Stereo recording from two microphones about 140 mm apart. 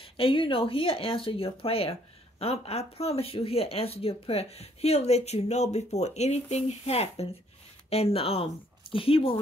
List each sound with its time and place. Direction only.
0.0 s speech: 40° left (ahead or behind)